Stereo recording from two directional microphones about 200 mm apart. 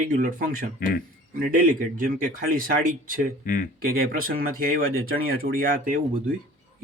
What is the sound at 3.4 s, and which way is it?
Speech, 40° left (ahead or behind).